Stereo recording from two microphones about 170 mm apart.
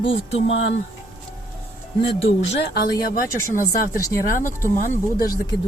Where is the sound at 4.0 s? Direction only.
20° left (ahead or behind).